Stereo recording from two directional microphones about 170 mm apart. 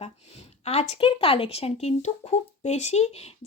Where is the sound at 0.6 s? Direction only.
40° left (ahead or behind).